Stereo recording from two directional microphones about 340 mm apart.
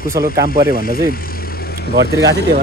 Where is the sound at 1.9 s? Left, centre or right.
Right.